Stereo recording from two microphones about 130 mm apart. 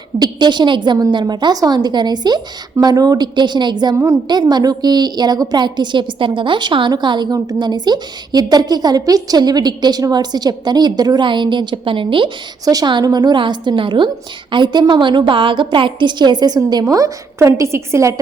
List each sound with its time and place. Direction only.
0.2 s a woman's voice: 35° right (ahead or behind)